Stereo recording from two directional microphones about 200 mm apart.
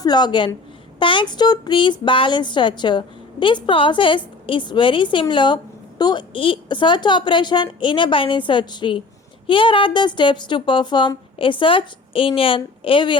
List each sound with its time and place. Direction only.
0.0 s speech: 20° left (ahead or behind)